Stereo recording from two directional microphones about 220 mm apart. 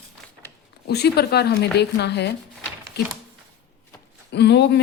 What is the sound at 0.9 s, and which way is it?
Speech, 45° left (ahead or behind).